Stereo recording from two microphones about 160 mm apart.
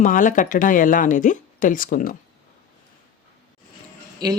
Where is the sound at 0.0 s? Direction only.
55° left (ahead or behind).